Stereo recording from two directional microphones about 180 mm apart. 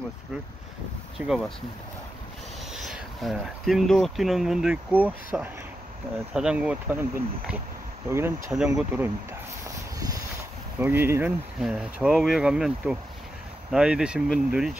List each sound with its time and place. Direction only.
1.2 s speech: 10° right (ahead or behind)
2.7 s speech: centre (ahead or behind)
8.5 s speech: 5° right (ahead or behind)
9.9 s a sound: 20° right (ahead or behind)
10.8 s speech: 10° right (ahead or behind)